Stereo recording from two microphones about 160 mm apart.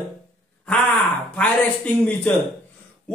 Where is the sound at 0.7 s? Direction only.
10° left (ahead or behind).